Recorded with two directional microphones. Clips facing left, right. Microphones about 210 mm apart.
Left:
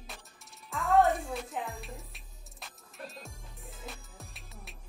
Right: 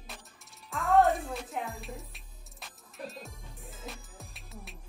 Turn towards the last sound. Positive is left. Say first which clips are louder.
# right 3 dB
turn(degrees=0)  # may be behind; listen again after turning